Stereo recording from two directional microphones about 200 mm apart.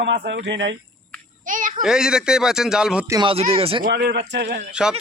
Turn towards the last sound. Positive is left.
turn(degrees=-5)  # may be behind; listen again after turning